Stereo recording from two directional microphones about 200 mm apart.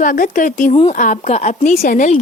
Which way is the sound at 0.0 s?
40° left (ahead or behind).